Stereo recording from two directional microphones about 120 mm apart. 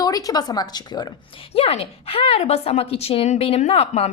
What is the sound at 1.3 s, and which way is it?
A woman's voice, 55° left (ahead or behind).